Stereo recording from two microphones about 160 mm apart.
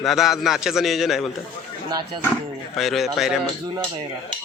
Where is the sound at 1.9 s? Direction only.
25° right (ahead or behind).